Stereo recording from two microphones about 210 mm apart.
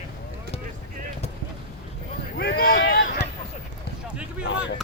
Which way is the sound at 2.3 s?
50° left (ahead or behind).